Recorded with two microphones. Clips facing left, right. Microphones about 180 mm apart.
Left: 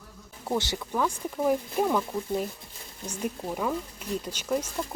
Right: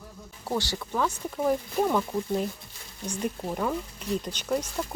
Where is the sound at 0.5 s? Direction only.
20° left (ahead or behind).